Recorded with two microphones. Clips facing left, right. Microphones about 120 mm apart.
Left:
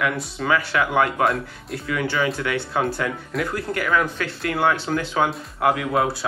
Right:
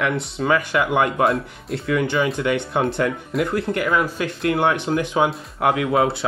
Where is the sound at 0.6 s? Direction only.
15° right (ahead or behind).